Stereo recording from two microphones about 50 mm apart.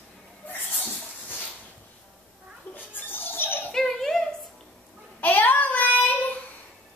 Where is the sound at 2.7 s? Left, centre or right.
Left.